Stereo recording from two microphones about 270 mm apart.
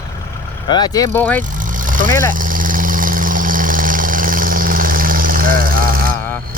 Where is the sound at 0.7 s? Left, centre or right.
Centre.